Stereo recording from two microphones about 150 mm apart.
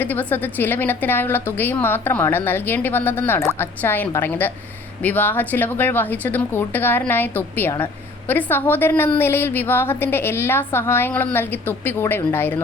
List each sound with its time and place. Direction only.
0.0 s a woman's voice: 10° left (ahead or behind)